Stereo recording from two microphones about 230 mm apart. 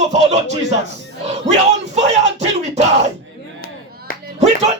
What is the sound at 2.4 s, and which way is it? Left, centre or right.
Battle cry, right.